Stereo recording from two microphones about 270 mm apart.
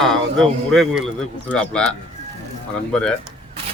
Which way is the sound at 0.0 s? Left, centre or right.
Centre.